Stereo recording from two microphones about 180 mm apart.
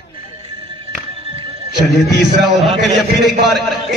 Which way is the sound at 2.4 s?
Centre (ahead or behind).